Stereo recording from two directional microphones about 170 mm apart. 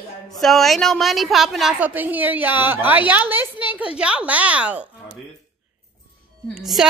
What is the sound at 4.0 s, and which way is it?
Speech, 5° right (ahead or behind).